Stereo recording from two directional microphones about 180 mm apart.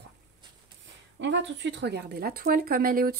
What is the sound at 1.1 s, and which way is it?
Speech, 85° right.